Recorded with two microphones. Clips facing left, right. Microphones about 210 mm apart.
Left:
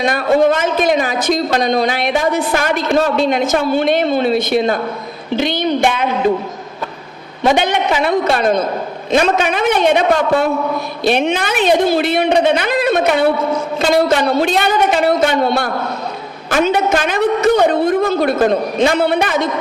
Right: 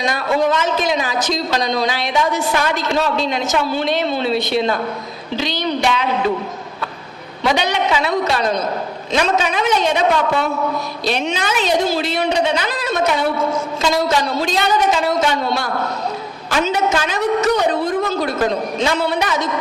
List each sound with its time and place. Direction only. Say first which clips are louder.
0.0 s a man's voice: left 5 dB; 55° left (ahead or behind)
7.4 s a man's voice: left 4 dB; 50° left (ahead or behind)